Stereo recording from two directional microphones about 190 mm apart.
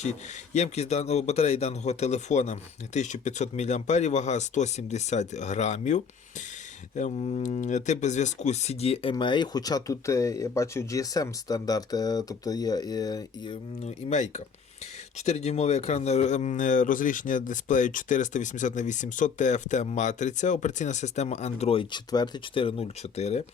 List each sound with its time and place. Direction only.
0.0 s speech: 35° left (ahead or behind)